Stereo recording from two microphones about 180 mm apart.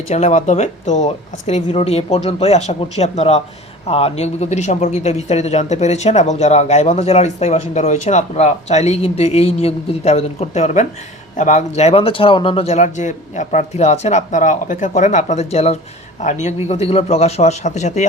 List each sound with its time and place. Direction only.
0.1 s speech: 40° left (ahead or behind)